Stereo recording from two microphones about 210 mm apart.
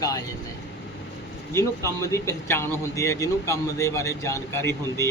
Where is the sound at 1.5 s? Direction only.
15° left (ahead or behind).